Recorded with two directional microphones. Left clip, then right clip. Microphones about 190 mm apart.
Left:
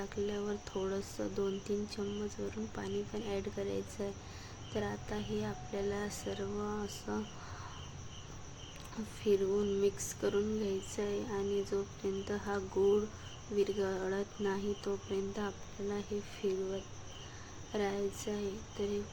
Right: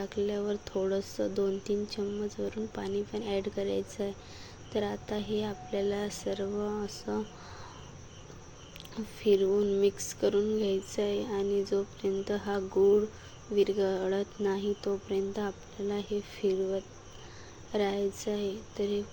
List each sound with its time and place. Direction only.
0.0 s speech: 15° right (ahead or behind)
9.2 s speech: 15° right (ahead or behind)
17.7 s speech: 15° right (ahead or behind)